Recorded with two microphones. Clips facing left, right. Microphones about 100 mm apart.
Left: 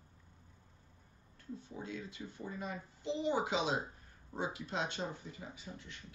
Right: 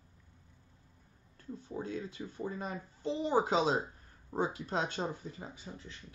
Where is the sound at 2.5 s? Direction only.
35° right (ahead or behind).